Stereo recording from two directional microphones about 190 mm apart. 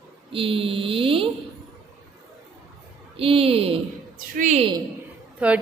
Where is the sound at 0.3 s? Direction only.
30° right (ahead or behind).